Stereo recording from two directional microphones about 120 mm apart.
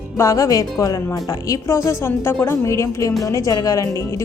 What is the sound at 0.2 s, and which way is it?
A woman's voice, 25° left (ahead or behind).